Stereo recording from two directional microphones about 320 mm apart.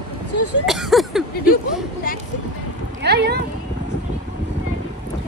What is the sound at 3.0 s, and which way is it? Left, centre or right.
Speech, right.